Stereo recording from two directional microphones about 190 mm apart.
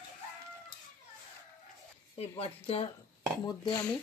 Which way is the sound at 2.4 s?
30° left (ahead or behind).